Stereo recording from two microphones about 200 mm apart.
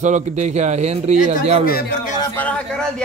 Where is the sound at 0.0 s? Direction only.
35° right (ahead or behind).